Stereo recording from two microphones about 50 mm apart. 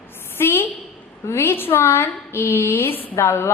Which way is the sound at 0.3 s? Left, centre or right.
Left.